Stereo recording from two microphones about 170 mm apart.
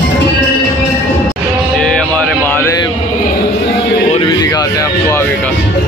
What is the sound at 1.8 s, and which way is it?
Music, 5° left (ahead or behind).